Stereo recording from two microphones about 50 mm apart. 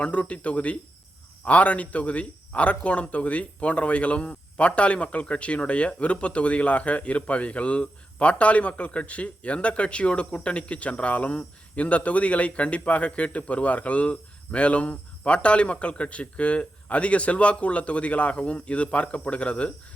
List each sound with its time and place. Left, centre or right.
0.0 s speech: left